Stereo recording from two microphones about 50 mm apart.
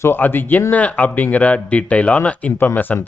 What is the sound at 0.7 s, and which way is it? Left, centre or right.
Speech, left.